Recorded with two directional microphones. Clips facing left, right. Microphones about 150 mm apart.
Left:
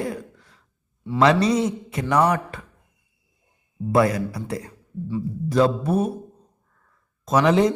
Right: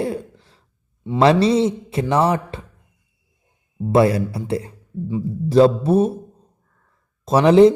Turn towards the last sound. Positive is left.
turn(degrees=-30)  # may be behind; listen again after turning